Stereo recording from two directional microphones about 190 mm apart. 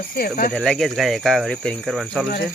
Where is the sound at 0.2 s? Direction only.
50° left (ahead or behind).